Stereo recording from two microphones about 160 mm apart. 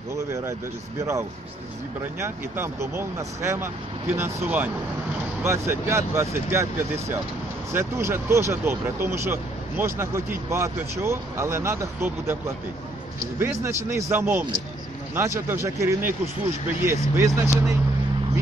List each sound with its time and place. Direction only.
2.1 s speech: 15° right (ahead or behind)